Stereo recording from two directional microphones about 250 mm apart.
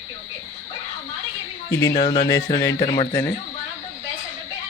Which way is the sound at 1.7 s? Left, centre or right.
Centre.